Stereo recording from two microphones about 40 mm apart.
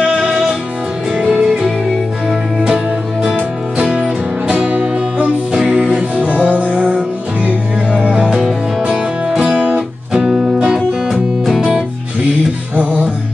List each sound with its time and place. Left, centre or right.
1.3 s music: centre
3.7 s music: centre
8.0 s music: right
9.8 s music: centre
10.9 s music: centre
12.7 s music: right